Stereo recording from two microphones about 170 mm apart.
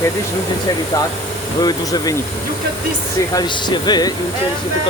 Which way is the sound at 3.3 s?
25° left (ahead or behind).